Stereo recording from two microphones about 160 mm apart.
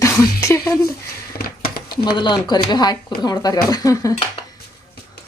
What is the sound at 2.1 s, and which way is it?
Speech, 30° left (ahead or behind).